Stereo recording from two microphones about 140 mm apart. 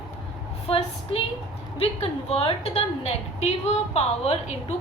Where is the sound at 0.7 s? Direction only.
40° left (ahead or behind).